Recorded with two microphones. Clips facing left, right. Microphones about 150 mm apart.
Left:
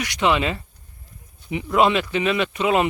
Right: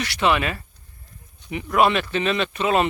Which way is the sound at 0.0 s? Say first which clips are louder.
Left 1 dB; 15° left (ahead or behind).